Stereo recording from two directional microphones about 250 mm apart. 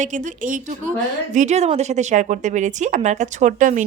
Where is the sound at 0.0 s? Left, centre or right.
Right.